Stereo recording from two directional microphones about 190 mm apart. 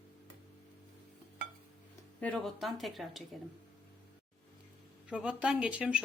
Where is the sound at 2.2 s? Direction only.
5° left (ahead or behind).